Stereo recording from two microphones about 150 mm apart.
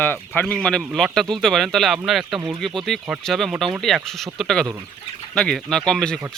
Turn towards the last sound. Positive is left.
turn(degrees=5)  # may be behind; listen again after turning